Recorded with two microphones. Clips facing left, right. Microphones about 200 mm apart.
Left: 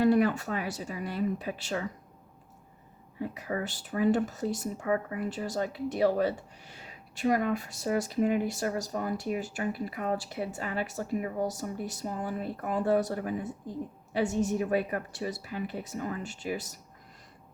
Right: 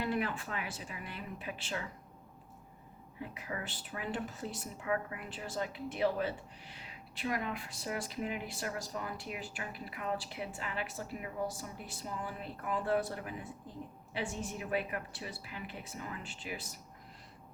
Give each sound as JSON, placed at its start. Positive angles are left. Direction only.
{"t": 0.0, "sound": "speech", "side_deg": 40}
{"t": 3.2, "sound": "speech", "side_deg": 40}